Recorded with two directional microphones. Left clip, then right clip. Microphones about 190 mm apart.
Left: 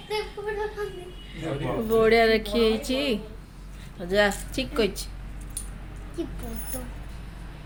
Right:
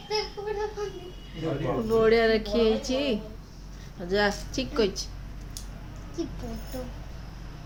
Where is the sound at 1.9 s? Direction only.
10° left (ahead or behind).